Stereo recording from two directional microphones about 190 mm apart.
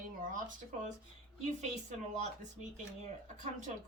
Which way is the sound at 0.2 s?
45° right (ahead or behind).